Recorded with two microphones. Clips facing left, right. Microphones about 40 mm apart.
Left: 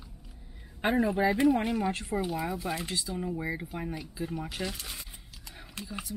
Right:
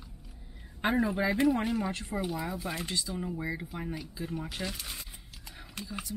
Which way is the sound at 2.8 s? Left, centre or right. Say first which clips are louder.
Even; centre.